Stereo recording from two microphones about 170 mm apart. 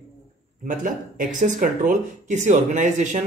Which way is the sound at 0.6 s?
50° right (ahead or behind).